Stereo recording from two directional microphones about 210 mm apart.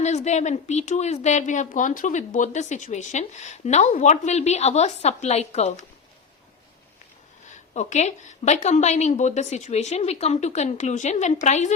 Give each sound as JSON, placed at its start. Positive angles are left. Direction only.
{"t": 0.0, "sound": "a woman's voice", "side_deg": 35}
{"t": 7.4, "sound": "a woman's voice", "side_deg": 35}